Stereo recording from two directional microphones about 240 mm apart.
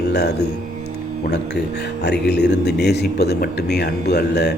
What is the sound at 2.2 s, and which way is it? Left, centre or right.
Speech, left.